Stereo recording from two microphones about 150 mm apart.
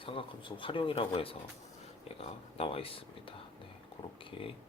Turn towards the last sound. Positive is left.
turn(degrees=35)  # may be behind; listen again after turning